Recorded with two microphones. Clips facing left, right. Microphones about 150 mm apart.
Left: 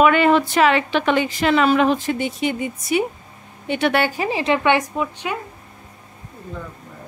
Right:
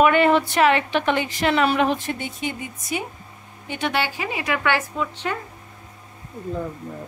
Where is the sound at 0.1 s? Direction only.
90° left.